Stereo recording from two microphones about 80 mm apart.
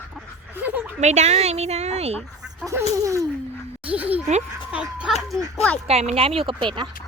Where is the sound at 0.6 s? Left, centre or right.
Right.